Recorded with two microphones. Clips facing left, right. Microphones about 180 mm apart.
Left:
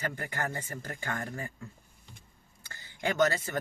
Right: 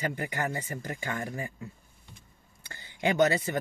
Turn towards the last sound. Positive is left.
turn(degrees=-15)  # may be behind; listen again after turning